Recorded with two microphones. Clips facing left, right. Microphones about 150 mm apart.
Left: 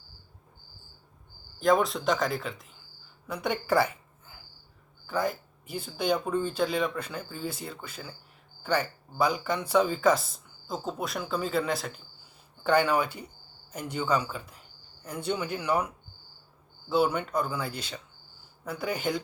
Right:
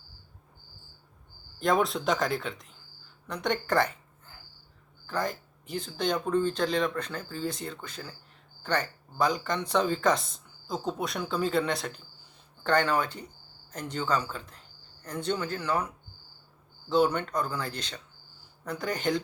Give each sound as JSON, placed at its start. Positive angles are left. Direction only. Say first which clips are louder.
{"t": 1.5, "sound": "speech", "louder": "left 2 dB", "side_deg": 0}
{"t": 16.9, "sound": "speech", "louder": "right 1 dB", "side_deg": 5}